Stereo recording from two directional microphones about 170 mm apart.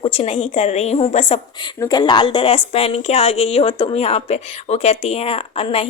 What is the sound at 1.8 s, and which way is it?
A woman's voice, 25° left (ahead or behind).